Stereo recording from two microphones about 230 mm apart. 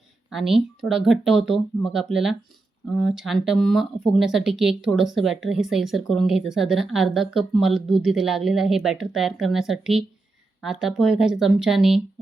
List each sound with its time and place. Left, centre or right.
0.3 s speech: centre